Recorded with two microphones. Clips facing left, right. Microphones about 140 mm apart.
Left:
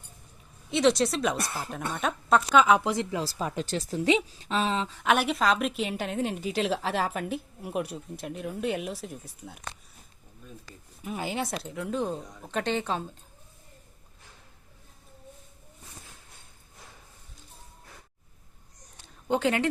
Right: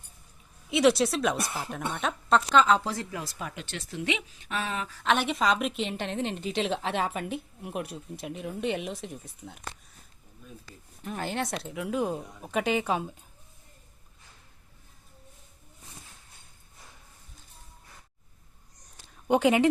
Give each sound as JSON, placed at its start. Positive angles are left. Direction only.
{"t": 0.7, "sound": "a woman's voice", "side_deg": -5}
{"t": 5.0, "sound": "a woman's voice", "side_deg": 5}
{"t": 11.0, "sound": "a woman's voice", "side_deg": 5}
{"t": 19.3, "sound": "a woman's voice", "side_deg": -15}